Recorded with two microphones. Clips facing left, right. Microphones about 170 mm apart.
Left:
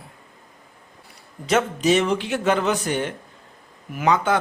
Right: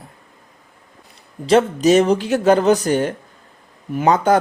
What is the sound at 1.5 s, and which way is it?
Speech, 35° right (ahead or behind).